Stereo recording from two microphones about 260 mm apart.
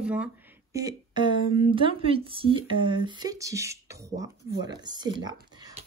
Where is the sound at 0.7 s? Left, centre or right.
Centre.